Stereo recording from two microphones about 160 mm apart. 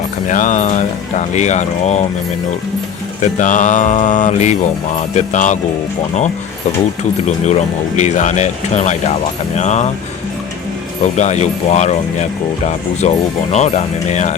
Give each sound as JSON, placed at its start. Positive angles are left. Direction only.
{"t": 0.3, "sound": "speech", "side_deg": 50}
{"t": 3.2, "sound": "speech", "side_deg": 50}
{"t": 7.4, "sound": "speech", "side_deg": 45}
{"t": 11.2, "sound": "speech", "side_deg": 45}